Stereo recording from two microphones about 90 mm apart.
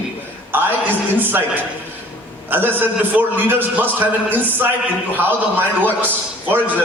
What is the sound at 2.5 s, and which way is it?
A man's voice, 20° right (ahead or behind).